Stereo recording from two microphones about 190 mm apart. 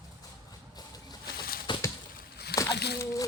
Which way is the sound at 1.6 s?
25° left (ahead or behind).